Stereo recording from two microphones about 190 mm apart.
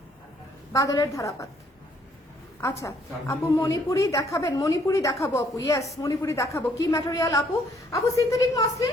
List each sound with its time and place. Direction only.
0.7 s a woman's voice: 15° left (ahead or behind)
2.6 s a woman's voice: 15° left (ahead or behind)